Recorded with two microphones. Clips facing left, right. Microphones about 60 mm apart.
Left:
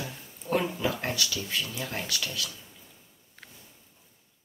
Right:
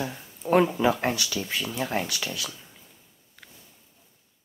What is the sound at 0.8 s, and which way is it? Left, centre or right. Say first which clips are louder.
Speech: right 6 dB; right.